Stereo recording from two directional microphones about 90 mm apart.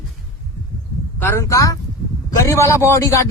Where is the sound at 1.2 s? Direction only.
30° left (ahead or behind).